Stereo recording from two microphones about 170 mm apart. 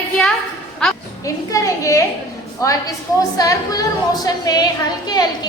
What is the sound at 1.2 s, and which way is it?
A woman's voice, 20° left (ahead or behind).